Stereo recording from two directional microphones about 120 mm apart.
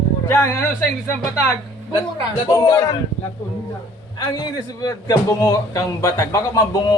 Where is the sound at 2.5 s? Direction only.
25° left (ahead or behind).